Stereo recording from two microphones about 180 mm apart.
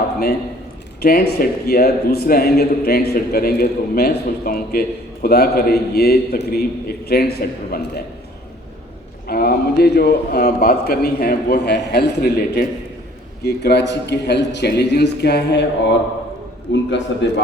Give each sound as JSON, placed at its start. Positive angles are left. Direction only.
{"t": 1.0, "sound": "a man's voice", "side_deg": 55}
{"t": 9.2, "sound": "a man's voice", "side_deg": 60}
{"t": 16.7, "sound": "a man's voice", "side_deg": 85}